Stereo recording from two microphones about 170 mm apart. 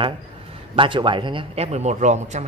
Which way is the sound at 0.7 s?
30° right (ahead or behind).